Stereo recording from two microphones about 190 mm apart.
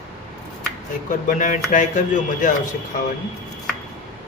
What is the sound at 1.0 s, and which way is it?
Speech, 40° left (ahead or behind).